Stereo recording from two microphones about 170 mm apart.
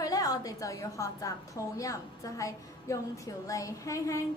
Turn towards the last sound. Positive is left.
turn(degrees=20)  # may be behind; listen again after turning